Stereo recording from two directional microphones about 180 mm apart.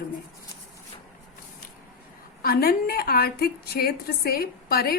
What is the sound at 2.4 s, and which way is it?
A woman's voice, 55° left (ahead or behind).